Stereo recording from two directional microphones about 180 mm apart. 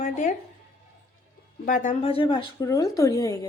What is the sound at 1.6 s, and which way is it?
Speech, 45° left (ahead or behind).